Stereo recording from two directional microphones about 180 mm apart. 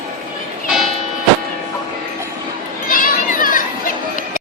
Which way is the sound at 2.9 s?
50° left (ahead or behind).